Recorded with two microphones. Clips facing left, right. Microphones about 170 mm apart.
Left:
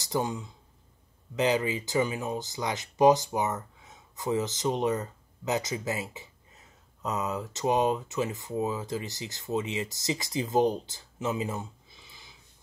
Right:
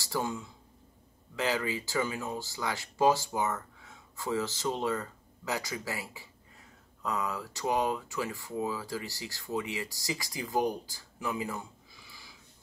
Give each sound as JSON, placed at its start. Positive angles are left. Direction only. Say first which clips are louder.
{"t": 0.0, "sound": "speech", "louder": "left 3 dB", "side_deg": 20}